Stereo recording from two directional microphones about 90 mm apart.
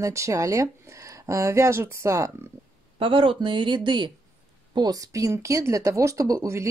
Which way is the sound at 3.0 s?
75° right (ahead or behind).